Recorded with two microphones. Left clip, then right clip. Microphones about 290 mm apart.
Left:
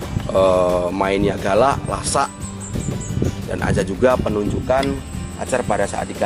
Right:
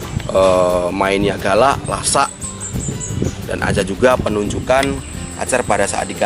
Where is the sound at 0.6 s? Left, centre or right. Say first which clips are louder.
Right 3 dB; left.